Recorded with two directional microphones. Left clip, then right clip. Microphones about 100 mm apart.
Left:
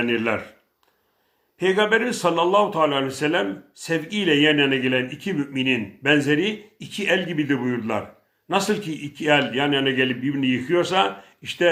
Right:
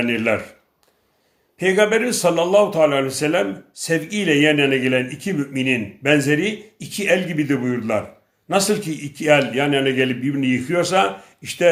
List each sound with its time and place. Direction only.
0.0 s speech: 20° right (ahead or behind)
1.5 s a man's voice: 15° right (ahead or behind)